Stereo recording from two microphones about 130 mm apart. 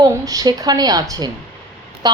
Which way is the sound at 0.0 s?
30° right (ahead or behind).